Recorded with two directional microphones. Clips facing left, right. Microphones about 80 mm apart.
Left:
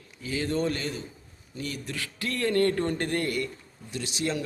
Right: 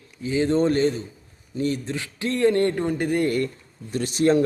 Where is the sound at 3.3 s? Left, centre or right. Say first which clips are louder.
Right 7 dB; right.